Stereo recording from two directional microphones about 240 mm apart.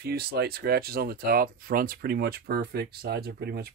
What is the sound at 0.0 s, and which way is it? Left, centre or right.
Speech, right.